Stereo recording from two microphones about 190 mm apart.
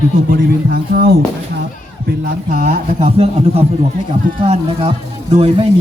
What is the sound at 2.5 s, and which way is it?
Speech, 50° right (ahead or behind).